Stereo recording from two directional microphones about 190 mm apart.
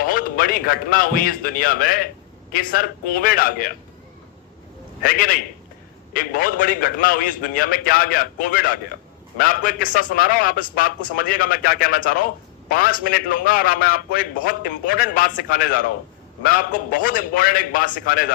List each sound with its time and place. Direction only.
0.0 s a man's voice: 50° left (ahead or behind)
5.0 s a man's voice: 50° left (ahead or behind)